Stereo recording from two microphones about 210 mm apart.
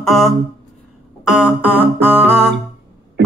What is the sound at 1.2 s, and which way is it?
Music, 5° right (ahead or behind).